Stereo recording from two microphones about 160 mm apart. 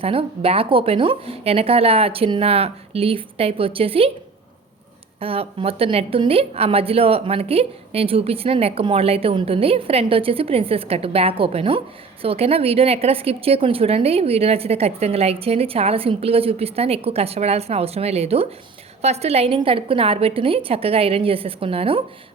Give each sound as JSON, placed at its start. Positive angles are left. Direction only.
{"t": 0.0, "sound": "a woman's voice", "side_deg": -35}
{"t": 5.2, "sound": "a woman's voice", "side_deg": -35}